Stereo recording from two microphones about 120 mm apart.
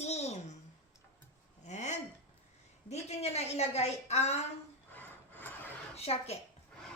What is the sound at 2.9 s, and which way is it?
Speech, 65° left (ahead or behind).